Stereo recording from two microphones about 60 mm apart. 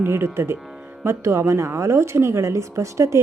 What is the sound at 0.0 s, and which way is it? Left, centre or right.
A woman's voice, right.